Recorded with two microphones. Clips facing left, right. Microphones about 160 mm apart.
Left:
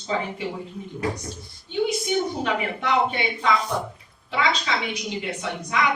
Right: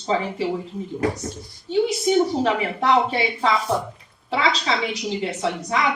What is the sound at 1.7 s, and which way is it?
Speech, 35° right (ahead or behind).